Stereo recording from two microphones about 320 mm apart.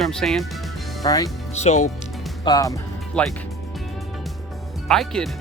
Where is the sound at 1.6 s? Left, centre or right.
Left.